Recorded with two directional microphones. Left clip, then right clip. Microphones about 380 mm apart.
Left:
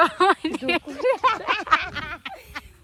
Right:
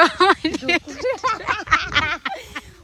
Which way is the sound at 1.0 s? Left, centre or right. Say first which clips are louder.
Left 5 dB; left.